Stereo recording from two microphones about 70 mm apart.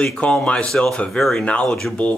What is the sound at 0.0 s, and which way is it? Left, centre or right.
Speech, centre.